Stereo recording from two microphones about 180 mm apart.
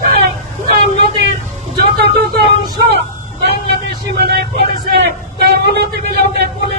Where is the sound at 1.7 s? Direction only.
65° right (ahead or behind).